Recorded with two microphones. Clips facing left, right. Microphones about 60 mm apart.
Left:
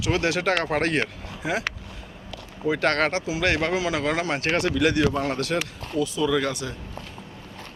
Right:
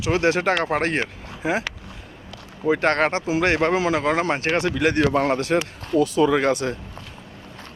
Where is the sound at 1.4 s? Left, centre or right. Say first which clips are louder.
Right 4 dB; right.